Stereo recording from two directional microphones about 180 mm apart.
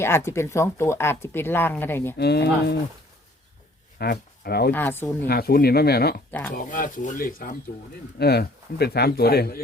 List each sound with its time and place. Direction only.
0.3 s speech: 15° left (ahead or behind)
2.1 s speech: 65° left (ahead or behind)
3.9 s speech: 60° left (ahead or behind)
4.7 s speech: 10° left (ahead or behind)
5.3 s speech: 60° left (ahead or behind)
6.5 s speech: 50° left (ahead or behind)
8.2 s speech: 65° left (ahead or behind)